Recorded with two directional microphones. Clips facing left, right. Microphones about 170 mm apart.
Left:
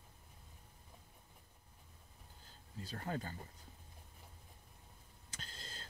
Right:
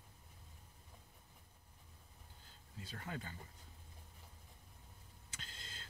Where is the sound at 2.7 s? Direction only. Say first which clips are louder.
Left 5 dB; 40° left (ahead or behind).